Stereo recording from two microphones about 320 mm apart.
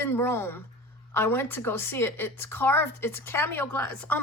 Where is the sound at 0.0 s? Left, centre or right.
Centre.